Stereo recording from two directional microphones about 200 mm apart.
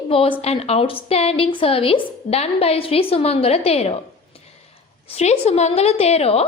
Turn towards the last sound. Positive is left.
turn(degrees=30)  # may be behind; listen again after turning